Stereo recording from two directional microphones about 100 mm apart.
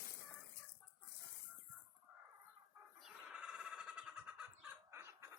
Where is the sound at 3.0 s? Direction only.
5° right (ahead or behind).